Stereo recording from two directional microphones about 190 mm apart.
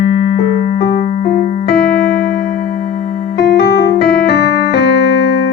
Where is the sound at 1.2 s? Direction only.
50° left (ahead or behind).